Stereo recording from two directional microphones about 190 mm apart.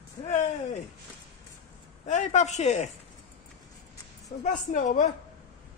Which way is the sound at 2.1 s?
40° left (ahead or behind).